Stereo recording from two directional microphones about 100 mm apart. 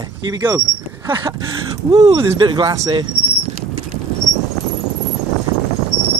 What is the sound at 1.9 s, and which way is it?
Speech, 90° right.